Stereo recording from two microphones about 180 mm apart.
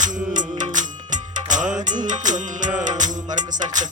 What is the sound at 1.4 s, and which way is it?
Music, 45° right (ahead or behind).